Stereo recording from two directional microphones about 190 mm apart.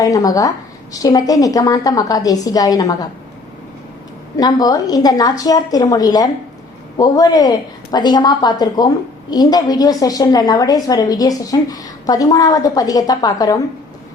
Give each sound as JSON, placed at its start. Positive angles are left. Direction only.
{"t": 0.0, "sound": "a woman's voice", "side_deg": 20}
{"t": 4.4, "sound": "a woman's voice", "side_deg": 20}